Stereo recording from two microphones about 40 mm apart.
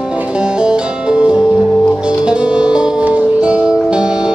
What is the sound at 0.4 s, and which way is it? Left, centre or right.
Music, right.